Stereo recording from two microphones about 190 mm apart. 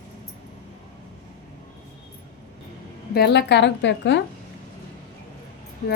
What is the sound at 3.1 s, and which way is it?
A woman's voice, 60° left (ahead or behind).